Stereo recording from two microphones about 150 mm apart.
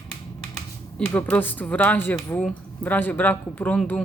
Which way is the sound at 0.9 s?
10° left (ahead or behind).